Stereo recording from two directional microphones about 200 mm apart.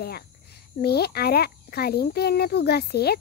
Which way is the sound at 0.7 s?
50° left (ahead or behind).